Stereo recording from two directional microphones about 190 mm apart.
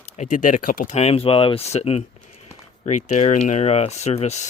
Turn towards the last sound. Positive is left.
turn(degrees=35)  # may be behind; listen again after turning